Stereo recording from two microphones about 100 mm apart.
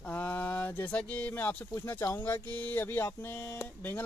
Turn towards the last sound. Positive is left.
turn(degrees=20)  # may be behind; listen again after turning